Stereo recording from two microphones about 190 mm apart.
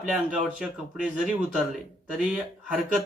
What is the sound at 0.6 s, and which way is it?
Speech, 5° right (ahead or behind).